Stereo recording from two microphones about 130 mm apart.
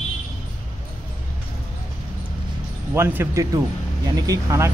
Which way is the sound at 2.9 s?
20° right (ahead or behind).